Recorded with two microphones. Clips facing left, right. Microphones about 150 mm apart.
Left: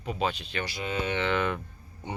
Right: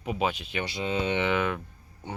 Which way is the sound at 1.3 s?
5° right (ahead or behind).